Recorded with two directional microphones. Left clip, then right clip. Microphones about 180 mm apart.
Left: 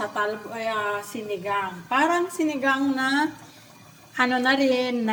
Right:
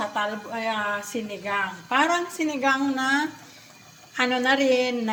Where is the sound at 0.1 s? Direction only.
5° right (ahead or behind).